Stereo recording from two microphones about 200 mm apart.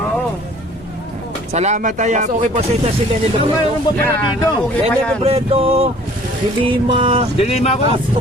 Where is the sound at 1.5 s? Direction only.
35° right (ahead or behind).